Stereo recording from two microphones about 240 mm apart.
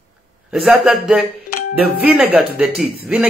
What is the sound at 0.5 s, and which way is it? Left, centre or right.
Speech, centre.